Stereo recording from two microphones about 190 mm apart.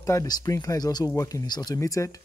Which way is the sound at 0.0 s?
15° left (ahead or behind).